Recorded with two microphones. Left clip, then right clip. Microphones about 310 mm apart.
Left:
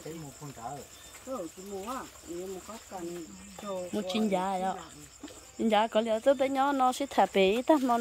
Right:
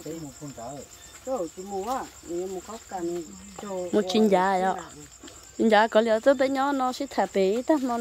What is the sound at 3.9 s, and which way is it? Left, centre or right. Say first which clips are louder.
Speech: right 10 dB; centre.